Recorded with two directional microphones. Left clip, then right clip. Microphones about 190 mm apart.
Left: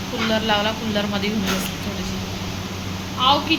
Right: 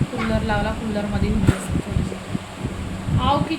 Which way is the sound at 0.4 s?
5° right (ahead or behind).